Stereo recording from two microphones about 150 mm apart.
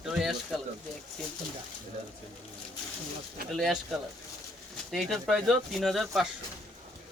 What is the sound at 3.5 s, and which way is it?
Speech, centre (ahead or behind).